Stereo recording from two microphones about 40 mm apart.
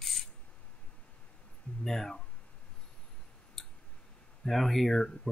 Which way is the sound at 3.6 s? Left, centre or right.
Centre.